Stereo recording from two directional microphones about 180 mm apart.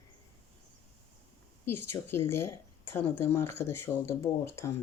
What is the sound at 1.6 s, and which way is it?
Speech, 15° left (ahead or behind).